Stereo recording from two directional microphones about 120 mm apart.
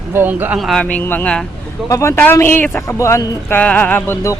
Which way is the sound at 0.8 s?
15° left (ahead or behind).